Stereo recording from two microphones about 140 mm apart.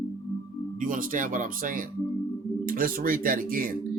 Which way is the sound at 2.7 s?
90° right.